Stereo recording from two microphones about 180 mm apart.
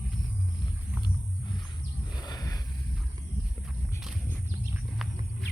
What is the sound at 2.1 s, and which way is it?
Wild animals, 20° left (ahead or behind).